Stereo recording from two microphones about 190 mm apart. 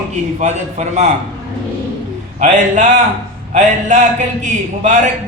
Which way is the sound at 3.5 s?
40° right (ahead or behind).